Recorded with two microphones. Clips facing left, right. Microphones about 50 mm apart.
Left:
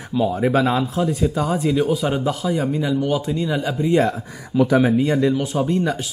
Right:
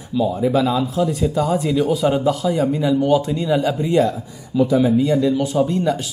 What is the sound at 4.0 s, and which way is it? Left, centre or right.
Speech, left.